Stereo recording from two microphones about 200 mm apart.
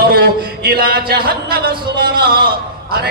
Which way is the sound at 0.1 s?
50° right (ahead or behind).